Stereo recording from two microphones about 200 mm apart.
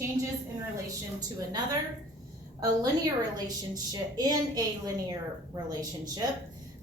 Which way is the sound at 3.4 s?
20° right (ahead or behind).